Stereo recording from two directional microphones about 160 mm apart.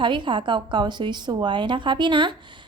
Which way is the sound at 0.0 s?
30° right (ahead or behind).